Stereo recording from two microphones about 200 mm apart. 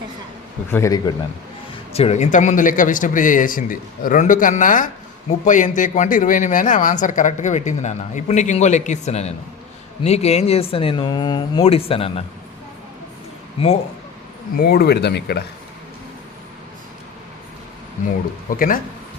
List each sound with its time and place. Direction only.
0.7 s speech: 15° left (ahead or behind)
1.9 s speech: 30° left (ahead or behind)
13.6 s speech: 30° left (ahead or behind)
14.5 s speech: 50° left (ahead or behind)
18.5 s speech: 45° left (ahead or behind)